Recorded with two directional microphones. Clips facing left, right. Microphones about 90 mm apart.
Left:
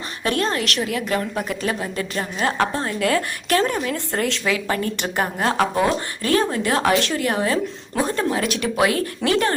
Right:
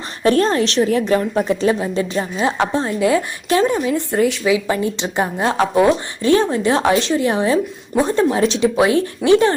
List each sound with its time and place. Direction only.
0.2 s a woman's voice: 35° right (ahead or behind)